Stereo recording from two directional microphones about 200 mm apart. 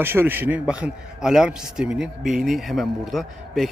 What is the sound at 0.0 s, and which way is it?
A man's voice, 10° right (ahead or behind).